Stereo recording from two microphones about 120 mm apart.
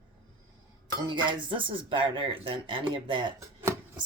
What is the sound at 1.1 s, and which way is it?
Speech, 45° right (ahead or behind).